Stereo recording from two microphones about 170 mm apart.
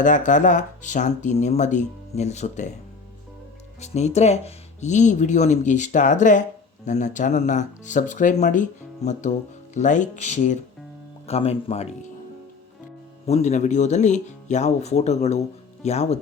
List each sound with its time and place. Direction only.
0.0 s speech: 50° left (ahead or behind)
3.8 s speech: 40° left (ahead or behind)
13.2 s speech: 40° left (ahead or behind)